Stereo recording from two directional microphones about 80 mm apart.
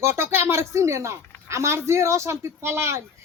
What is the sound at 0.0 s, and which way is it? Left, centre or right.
Speech, right.